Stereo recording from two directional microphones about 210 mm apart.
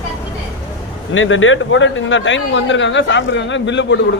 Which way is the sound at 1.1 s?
65° left (ahead or behind).